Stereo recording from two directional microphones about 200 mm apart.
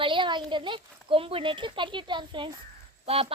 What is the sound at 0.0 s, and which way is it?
A child's voice, 25° right (ahead or behind).